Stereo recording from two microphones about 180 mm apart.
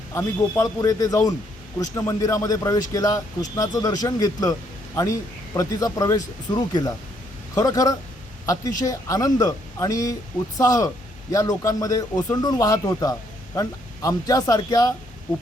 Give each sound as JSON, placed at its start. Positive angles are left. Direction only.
{"t": 0.1, "sound": "a man's voice", "side_deg": 15}